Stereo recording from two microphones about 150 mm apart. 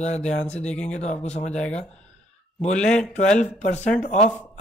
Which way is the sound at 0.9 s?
50° left (ahead or behind).